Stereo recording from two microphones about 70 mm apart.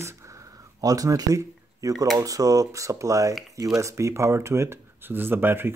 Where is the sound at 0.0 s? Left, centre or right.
Right.